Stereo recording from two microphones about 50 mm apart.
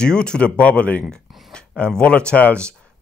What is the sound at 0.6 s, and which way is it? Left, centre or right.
Speech, left.